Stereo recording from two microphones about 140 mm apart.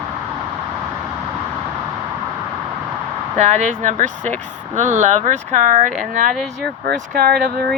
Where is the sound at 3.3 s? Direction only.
60° right (ahead or behind).